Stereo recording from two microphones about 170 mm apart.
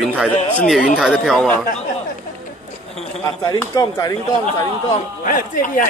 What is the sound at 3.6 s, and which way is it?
Speech, 20° left (ahead or behind).